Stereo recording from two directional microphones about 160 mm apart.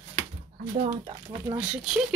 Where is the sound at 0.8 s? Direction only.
40° right (ahead or behind).